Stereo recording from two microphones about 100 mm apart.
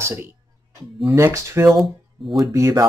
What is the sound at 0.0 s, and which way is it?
Speech, 25° right (ahead or behind).